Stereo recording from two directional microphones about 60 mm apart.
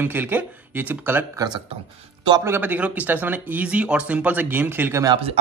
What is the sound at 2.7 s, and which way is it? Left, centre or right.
Speech, right.